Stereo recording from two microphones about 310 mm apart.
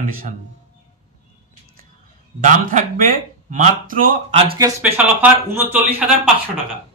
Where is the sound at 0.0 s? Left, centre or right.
Right.